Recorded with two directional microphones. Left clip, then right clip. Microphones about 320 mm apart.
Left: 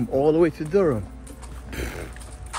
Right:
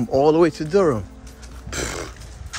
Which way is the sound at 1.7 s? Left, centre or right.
Centre.